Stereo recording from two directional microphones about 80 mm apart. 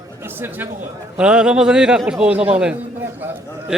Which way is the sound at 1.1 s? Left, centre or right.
Centre.